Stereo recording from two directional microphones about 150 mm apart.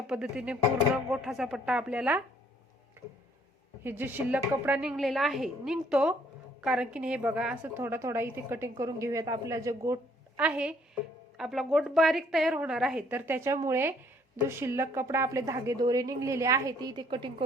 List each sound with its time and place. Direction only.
0.1 s speech: 5° right (ahead or behind)
3.8 s a woman's voice: 15° right (ahead or behind)
10.3 s a woman's voice: 10° right (ahead or behind); by 17.3 s 30° right (ahead or behind)